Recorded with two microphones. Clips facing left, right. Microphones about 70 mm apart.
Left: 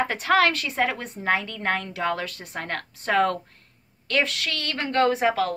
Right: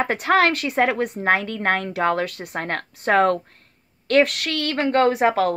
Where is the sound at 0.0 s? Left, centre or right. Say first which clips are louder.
Right 2 dB; right.